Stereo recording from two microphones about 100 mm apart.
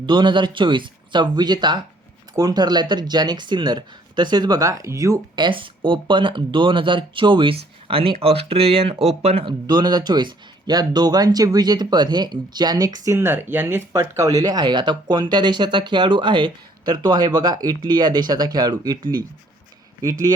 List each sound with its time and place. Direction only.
0.0 s speech: 50° right (ahead or behind); by 5.2 s 35° right (ahead or behind)
5.4 s speech: 55° right (ahead or behind); by 9.5 s 85° right
9.5 s speech: 45° right (ahead or behind)
13.1 s speech: 25° right (ahead or behind)
13.9 s speech: 35° right (ahead or behind)